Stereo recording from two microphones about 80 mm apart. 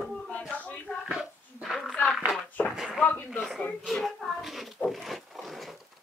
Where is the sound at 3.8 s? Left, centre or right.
Centre.